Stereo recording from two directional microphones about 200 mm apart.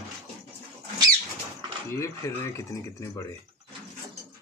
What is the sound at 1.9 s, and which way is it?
Speech, 15° left (ahead or behind).